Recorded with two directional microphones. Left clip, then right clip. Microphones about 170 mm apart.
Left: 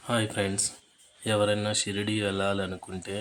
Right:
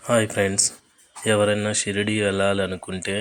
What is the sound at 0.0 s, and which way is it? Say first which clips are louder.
Speech: right 8 dB; 25° right (ahead or behind).